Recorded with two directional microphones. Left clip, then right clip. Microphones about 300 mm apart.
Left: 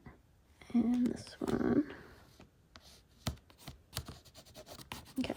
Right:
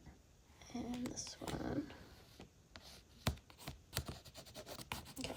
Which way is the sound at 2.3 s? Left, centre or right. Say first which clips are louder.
Right 1 dB; centre.